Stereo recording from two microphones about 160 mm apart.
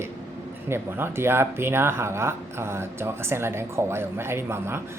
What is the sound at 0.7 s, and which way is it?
Speech, 15° right (ahead or behind).